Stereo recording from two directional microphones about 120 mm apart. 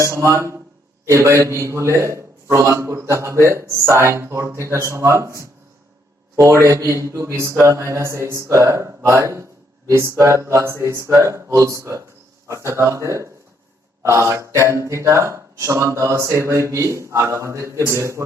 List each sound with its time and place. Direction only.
0.0 s a man's voice: 25° right (ahead or behind)